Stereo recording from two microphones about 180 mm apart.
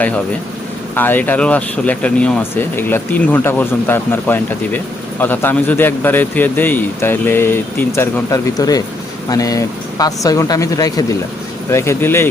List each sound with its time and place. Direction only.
0.9 s speech: 10° left (ahead or behind)